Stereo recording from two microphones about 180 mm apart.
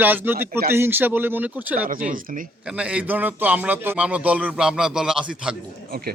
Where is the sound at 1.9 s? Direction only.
50° right (ahead or behind).